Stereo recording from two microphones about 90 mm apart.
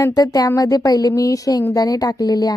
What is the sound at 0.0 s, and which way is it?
A woman's voice, 45° left (ahead or behind).